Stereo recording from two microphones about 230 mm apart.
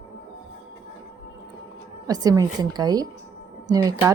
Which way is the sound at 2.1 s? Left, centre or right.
Centre.